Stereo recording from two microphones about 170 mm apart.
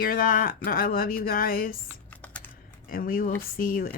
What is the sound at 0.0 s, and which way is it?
Speech, 55° left (ahead or behind).